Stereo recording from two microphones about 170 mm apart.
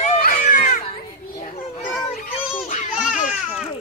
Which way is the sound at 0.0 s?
50° left (ahead or behind).